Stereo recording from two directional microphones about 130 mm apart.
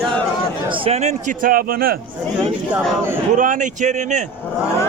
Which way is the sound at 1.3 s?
90° right.